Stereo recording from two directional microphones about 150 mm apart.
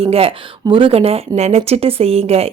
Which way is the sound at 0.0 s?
40° right (ahead or behind).